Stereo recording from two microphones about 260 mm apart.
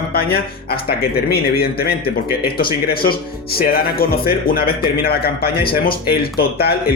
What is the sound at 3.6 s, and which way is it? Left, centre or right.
Speech, left.